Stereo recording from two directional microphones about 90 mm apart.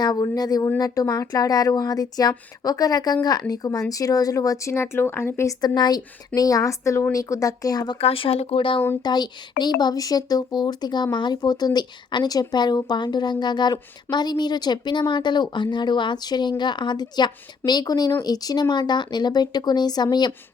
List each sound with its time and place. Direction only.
0.0 s speech: 45° left (ahead or behind); by 5.5 s 30° left (ahead or behind)
5.5 s speech: 50° left (ahead or behind)
7.9 s speech: 90° left
9.0 s speech: 50° left (ahead or behind)